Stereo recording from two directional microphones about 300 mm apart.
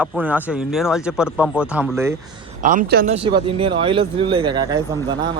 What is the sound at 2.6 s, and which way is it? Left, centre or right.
Speech, right.